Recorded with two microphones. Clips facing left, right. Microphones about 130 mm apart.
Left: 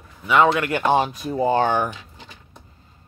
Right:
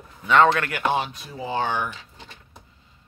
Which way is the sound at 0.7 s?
35° left (ahead or behind).